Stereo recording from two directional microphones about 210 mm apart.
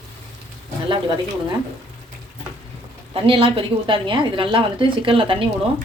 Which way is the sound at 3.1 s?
25° right (ahead or behind).